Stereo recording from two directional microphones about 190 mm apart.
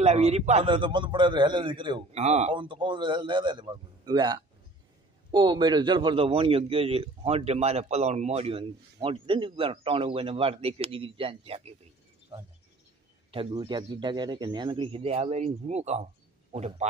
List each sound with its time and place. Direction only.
0.0 s a man's voice: 35° right (ahead or behind)
0.7 s a man's voice: 25° right (ahead or behind)
2.5 s a man's voice: 25° right (ahead or behind)
13.3 s a man's voice: 30° right (ahead or behind)